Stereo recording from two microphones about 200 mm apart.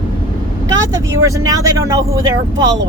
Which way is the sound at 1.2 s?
15° right (ahead or behind).